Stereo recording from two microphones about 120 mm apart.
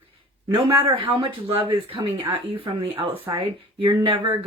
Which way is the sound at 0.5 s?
50° right (ahead or behind).